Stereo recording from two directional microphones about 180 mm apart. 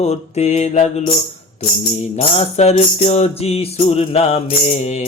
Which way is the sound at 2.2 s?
35° left (ahead or behind).